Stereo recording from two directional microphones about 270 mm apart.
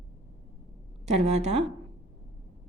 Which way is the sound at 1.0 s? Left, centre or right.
Right.